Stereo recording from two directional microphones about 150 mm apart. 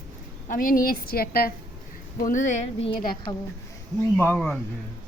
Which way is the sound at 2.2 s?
55° left (ahead or behind).